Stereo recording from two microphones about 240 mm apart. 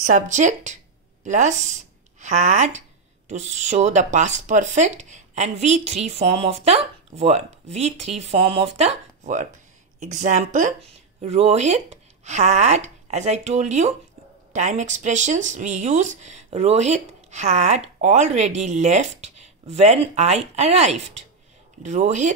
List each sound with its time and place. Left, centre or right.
0.0 s speech: right